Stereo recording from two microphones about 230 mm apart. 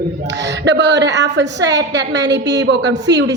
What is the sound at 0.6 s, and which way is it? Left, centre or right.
A woman's voice, right.